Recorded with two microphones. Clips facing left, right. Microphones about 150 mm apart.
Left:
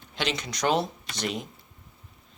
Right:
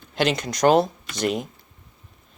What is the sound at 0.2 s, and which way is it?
Speech, 50° right (ahead or behind).